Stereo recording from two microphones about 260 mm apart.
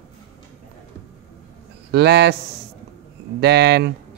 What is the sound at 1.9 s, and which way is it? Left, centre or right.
Speech, right.